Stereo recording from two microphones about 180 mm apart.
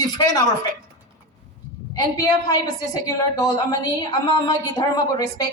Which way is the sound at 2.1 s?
20° left (ahead or behind).